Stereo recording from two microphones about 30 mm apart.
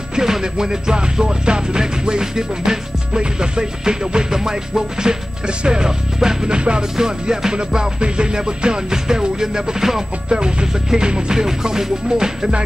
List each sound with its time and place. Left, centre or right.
0.1 s music: right
10.3 s music: right